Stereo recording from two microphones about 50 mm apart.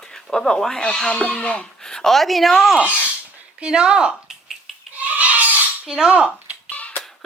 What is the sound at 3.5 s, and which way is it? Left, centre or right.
Speech, centre.